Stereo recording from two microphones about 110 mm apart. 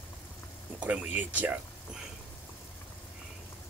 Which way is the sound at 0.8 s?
15° right (ahead or behind).